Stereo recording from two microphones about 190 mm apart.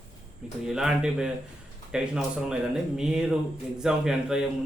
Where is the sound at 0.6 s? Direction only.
Centre (ahead or behind).